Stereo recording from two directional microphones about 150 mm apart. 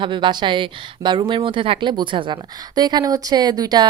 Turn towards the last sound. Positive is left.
turn(degrees=-25)  # may be behind; listen again after turning